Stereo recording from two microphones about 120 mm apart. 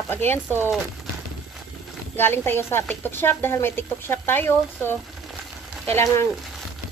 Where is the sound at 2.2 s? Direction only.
20° left (ahead or behind).